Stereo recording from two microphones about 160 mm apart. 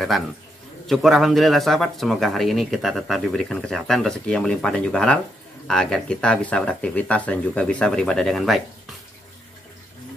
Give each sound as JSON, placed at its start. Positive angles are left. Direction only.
{"t": 0.8, "sound": "speech", "side_deg": 0}